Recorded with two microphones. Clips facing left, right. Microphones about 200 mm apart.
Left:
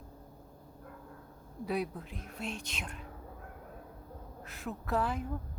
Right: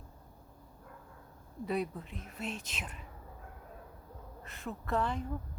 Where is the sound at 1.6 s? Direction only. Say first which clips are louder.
Even; centre (ahead or behind).